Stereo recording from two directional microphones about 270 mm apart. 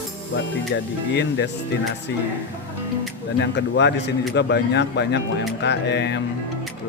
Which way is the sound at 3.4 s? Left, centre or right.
Left.